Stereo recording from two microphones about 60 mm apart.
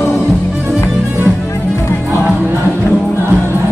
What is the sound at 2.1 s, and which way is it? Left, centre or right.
Music, right.